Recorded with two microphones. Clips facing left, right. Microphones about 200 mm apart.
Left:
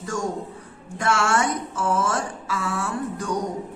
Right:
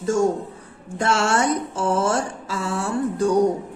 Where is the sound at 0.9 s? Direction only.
30° right (ahead or behind).